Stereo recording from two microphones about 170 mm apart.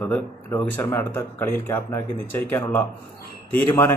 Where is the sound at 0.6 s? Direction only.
10° left (ahead or behind).